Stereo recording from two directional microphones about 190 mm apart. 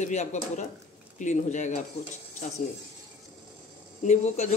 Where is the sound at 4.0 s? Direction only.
40° left (ahead or behind).